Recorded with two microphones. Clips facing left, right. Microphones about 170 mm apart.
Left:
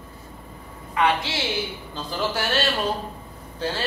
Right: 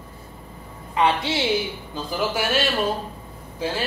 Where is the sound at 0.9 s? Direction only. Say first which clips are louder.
Right 1 dB; 25° right (ahead or behind).